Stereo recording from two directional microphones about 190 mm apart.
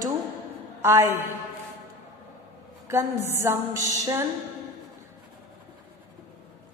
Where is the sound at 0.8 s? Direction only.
15° right (ahead or behind).